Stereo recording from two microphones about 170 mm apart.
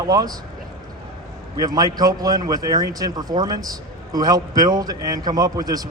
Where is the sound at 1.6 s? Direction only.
20° right (ahead or behind).